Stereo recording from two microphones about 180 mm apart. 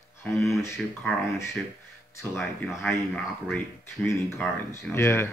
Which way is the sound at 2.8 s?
5° left (ahead or behind).